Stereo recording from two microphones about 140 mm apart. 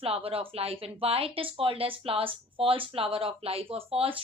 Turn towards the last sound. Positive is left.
turn(degrees=-40)  # may be behind; listen again after turning